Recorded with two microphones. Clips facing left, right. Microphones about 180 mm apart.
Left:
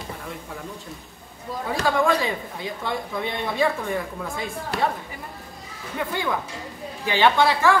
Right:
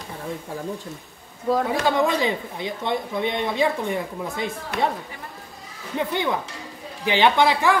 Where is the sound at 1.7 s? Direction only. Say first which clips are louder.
Even; 20° right (ahead or behind).